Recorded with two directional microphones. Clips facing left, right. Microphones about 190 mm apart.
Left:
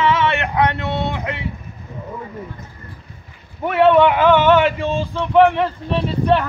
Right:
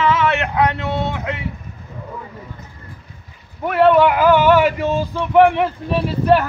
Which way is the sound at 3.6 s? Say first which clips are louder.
Even; 5° right (ahead or behind).